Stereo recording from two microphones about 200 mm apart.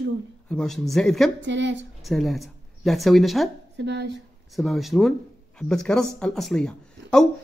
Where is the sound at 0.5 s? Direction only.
Centre (ahead or behind).